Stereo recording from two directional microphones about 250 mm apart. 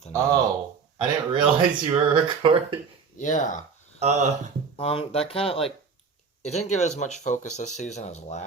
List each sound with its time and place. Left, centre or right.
0.1 s speech: centre
3.2 s speech: left
4.0 s speech: right
4.8 s speech: left